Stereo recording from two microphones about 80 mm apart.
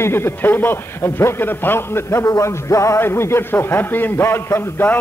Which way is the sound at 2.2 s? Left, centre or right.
Left.